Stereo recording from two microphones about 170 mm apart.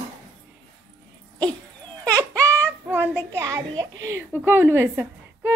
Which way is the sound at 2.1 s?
20° right (ahead or behind).